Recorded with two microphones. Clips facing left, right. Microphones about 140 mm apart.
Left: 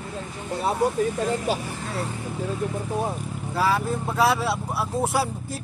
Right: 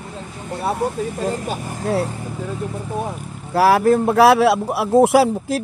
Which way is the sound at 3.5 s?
75° right (ahead or behind).